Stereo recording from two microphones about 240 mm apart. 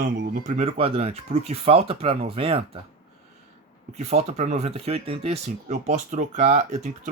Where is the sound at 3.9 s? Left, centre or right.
Right.